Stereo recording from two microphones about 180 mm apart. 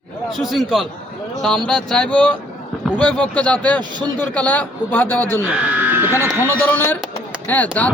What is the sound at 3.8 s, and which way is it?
Speech, 25° right (ahead or behind).